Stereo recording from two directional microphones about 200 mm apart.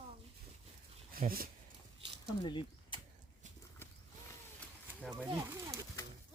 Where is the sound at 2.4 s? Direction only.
25° left (ahead or behind).